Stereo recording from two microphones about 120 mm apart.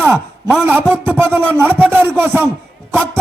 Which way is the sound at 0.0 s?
15° right (ahead or behind).